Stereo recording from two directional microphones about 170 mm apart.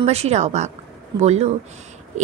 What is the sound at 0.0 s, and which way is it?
Speech, 40° right (ahead or behind).